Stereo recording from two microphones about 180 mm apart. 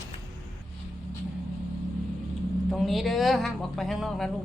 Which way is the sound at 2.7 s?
Centre (ahead or behind).